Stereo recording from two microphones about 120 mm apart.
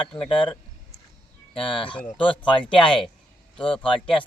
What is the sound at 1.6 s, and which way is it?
Speech, 45° left (ahead or behind).